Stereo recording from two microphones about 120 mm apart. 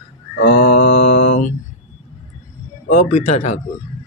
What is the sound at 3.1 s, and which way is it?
Speech, 65° left (ahead or behind).